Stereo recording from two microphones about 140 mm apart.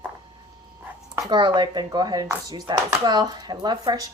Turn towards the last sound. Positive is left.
turn(degrees=-30)  # may be behind; listen again after turning